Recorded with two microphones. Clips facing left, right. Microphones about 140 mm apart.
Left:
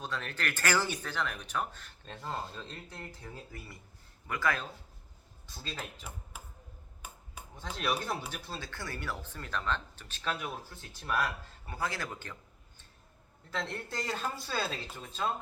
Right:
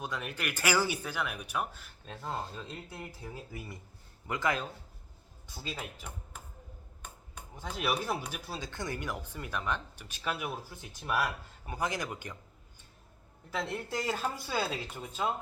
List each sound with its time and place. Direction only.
0.0 s speech: 10° right (ahead or behind)
5.7 s speech: 10° right (ahead or behind)
6.3 s typewriter: 5° left (ahead or behind)
7.0 s a sound: 5° left (ahead or behind)
7.5 s speech: 10° right (ahead or behind)
13.5 s speech: 5° right (ahead or behind)